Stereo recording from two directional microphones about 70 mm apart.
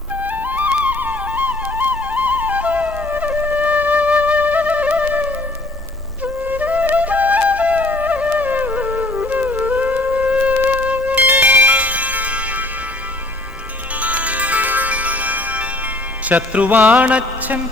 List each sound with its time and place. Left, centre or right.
0.2 s flute: right
14.0 s music: centre